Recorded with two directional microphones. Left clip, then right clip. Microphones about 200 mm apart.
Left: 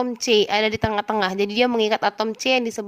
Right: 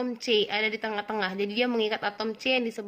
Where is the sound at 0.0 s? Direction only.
45° left (ahead or behind).